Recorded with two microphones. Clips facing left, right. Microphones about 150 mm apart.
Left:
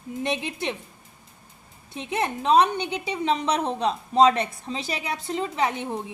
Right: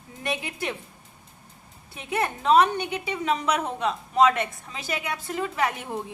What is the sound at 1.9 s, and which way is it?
A woman's voice, 20° left (ahead or behind).